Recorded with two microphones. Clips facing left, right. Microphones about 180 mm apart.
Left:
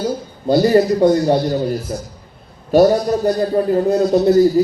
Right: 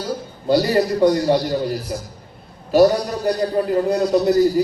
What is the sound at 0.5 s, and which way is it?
Speech, 25° left (ahead or behind).